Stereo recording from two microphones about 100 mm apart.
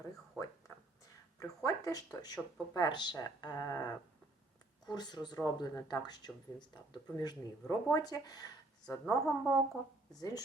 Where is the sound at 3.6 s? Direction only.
30° left (ahead or behind).